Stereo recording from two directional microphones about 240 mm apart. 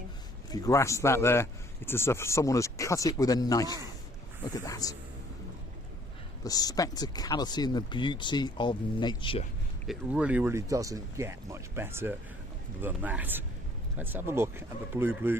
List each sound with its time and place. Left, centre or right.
0.5 s speech: centre
6.4 s speech: centre
9.8 s speech: centre